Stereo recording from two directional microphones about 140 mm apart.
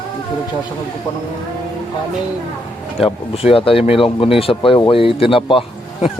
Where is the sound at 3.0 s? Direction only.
45° left (ahead or behind).